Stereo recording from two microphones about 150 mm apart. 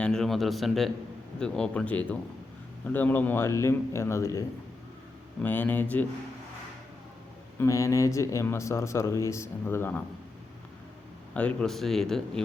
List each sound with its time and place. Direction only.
0.0 s a man's voice: 5° left (ahead or behind)
7.6 s speech: 20° left (ahead or behind)
11.3 s speech: 5° left (ahead or behind)